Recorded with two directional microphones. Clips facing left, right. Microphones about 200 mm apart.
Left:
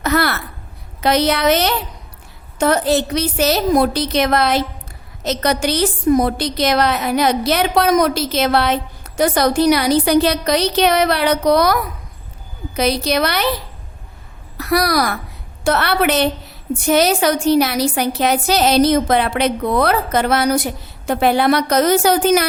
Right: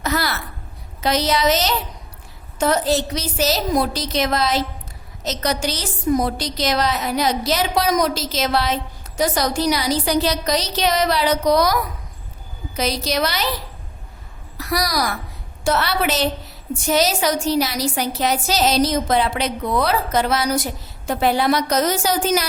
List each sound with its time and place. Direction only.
0.0 s a child's voice: 60° left (ahead or behind)
14.6 s a woman's voice: 60° left (ahead or behind)